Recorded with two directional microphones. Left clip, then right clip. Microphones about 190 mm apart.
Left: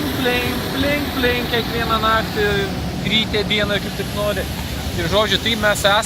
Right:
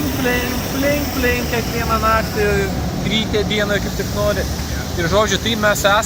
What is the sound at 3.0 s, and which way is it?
Speech, centre (ahead or behind).